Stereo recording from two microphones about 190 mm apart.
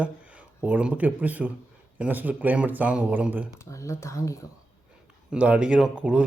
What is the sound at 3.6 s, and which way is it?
Speech, 15° left (ahead or behind).